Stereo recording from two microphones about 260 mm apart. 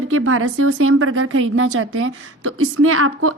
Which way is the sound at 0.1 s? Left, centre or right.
Right.